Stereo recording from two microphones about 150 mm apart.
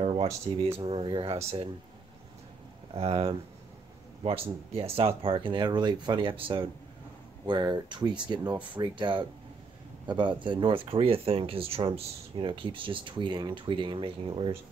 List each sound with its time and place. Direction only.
0.0 s a sound: 40° right (ahead or behind)
0.7 s speech: 35° right (ahead or behind)
2.9 s speech: 40° right (ahead or behind)